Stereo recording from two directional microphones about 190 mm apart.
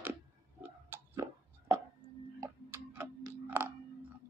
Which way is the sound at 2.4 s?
10° right (ahead or behind).